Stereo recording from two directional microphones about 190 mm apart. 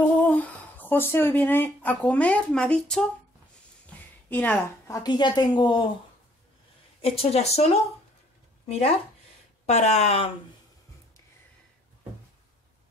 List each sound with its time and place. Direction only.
0.2 s speech: 10° left (ahead or behind)
4.3 s a woman's voice: 10° left (ahead or behind)
7.0 s a woman's voice: 30° left (ahead or behind)